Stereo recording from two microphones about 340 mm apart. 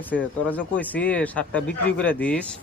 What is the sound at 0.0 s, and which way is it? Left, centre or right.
A man's voice, centre.